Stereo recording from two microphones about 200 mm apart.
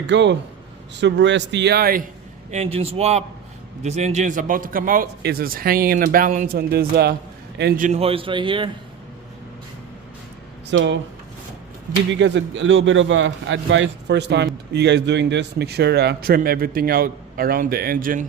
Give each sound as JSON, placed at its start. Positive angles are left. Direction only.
{"t": 0.1, "sound": "a man's voice", "side_deg": -60}
{"t": 2.5, "sound": "a man's voice", "side_deg": -30}
{"t": 7.6, "sound": "a man's voice", "side_deg": -40}
{"t": 10.7, "sound": "a man's voice", "side_deg": -65}
{"t": 12.1, "sound": "a man's voice", "side_deg": -65}